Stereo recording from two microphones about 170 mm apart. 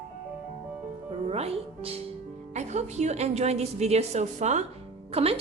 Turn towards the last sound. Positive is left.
turn(degrees=-35)  # may be behind; listen again after turning